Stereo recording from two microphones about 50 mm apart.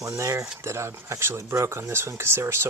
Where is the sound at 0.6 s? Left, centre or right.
Right.